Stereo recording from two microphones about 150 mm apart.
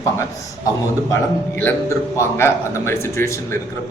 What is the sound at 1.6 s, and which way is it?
A man's voice, 15° left (ahead or behind).